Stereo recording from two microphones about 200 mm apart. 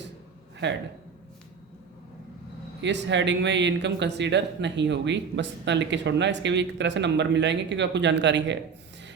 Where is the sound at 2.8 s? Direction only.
60° right (ahead or behind).